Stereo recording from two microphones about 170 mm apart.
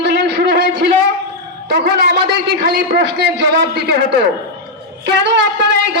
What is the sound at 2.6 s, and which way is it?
A man's voice, 70° right (ahead or behind).